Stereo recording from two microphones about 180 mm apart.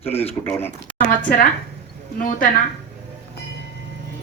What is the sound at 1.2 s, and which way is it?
Speech, 45° left (ahead or behind).